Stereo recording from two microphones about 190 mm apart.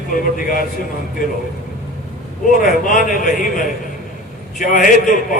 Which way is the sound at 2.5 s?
45° left (ahead or behind).